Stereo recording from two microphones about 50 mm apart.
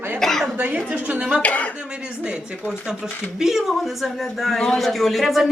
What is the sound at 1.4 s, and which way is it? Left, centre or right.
Speech, left.